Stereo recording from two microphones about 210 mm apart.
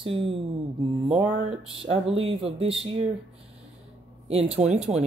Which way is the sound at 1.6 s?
25° right (ahead or behind).